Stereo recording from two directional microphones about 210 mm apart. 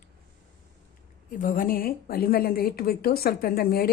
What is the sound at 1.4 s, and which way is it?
A woman's voice, 40° left (ahead or behind).